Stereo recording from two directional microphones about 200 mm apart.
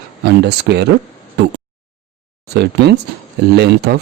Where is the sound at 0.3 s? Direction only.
55° right (ahead or behind).